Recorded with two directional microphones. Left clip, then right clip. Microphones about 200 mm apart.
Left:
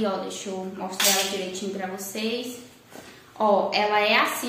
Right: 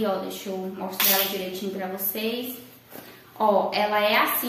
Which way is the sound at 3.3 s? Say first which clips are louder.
Even; centre (ahead or behind).